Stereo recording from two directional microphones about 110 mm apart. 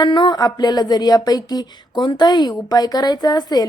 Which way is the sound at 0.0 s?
45° left (ahead or behind).